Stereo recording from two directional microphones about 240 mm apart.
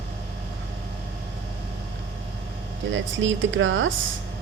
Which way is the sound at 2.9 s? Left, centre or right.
Right.